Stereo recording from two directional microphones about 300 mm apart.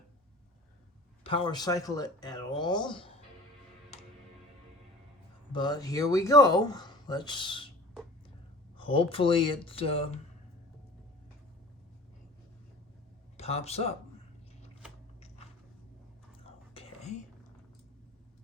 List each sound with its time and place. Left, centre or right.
1.2 s speech: centre
5.5 s speech: centre
8.8 s speech: centre
13.3 s speech: left
16.4 s whispering: centre